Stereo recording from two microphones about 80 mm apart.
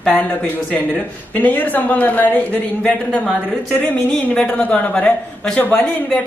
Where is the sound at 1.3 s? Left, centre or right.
Centre.